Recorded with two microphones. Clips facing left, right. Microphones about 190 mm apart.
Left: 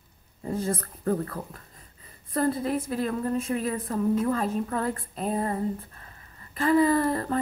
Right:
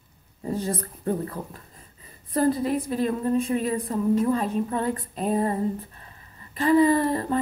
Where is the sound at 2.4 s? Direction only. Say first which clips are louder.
Right 3 dB; 25° right (ahead or behind).